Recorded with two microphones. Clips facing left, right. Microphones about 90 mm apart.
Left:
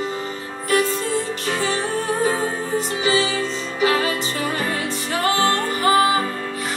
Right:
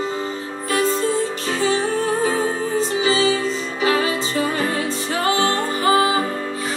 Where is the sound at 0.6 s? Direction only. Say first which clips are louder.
Left 1 dB; 25° right (ahead or behind).